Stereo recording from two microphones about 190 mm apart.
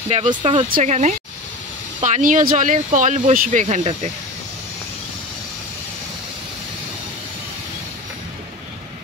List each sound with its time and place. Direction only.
0.1 s speech: 25° right (ahead or behind)
0.7 s speech: 40° right (ahead or behind)